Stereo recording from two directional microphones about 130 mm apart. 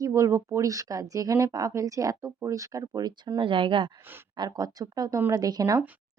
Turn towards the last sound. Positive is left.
turn(degrees=-30)  # may be behind; listen again after turning